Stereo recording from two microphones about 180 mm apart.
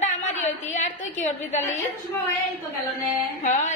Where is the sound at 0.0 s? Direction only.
40° left (ahead or behind).